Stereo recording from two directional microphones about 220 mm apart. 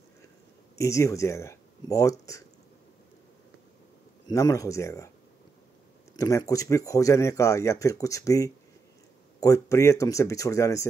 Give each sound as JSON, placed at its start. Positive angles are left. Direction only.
{"t": 0.7, "sound": "speech", "side_deg": 15}
{"t": 4.3, "sound": "speech", "side_deg": 15}
{"t": 6.1, "sound": "speech", "side_deg": 15}